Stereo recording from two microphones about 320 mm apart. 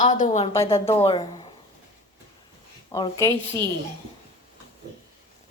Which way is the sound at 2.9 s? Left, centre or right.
Centre.